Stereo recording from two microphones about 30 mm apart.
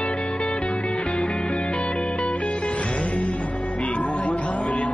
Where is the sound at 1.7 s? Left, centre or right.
Left.